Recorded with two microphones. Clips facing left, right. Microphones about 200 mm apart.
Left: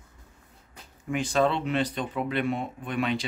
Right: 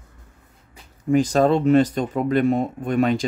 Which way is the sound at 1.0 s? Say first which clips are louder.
Right 8 dB; 40° right (ahead or behind).